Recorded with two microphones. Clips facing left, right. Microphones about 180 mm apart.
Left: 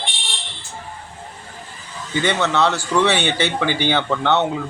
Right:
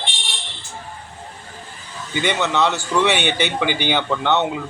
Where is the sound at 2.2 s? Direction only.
15° right (ahead or behind).